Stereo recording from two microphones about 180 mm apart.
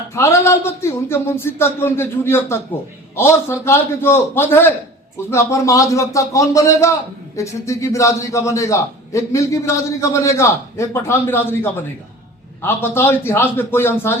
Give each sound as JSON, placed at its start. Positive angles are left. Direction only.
{"t": 0.1, "sound": "a man's voice", "side_deg": 15}